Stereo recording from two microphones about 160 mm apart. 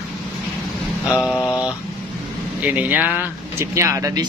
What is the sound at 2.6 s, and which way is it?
Speech, 10° right (ahead or behind).